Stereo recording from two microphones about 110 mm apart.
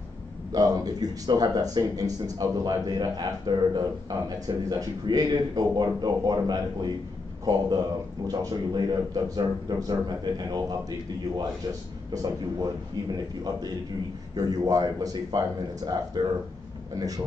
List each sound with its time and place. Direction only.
0.5 s a man's voice: 35° right (ahead or behind)